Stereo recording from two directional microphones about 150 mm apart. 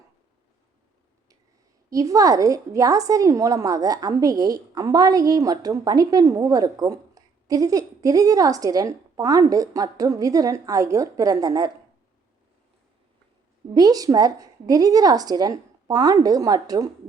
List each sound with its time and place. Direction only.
1.9 s a woman's voice: 20° right (ahead or behind)
13.7 s a woman's voice: 25° right (ahead or behind)